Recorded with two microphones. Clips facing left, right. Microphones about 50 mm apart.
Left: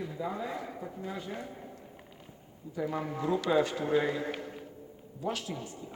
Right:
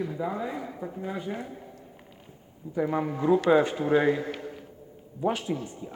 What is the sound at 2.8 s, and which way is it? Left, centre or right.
A man's voice, right.